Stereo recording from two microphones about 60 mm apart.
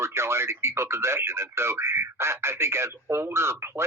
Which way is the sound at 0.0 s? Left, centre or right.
Right.